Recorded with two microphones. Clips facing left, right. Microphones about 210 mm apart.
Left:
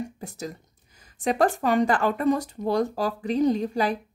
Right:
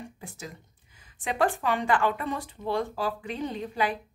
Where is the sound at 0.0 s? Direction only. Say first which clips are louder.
Left 8 dB; 40° left (ahead or behind).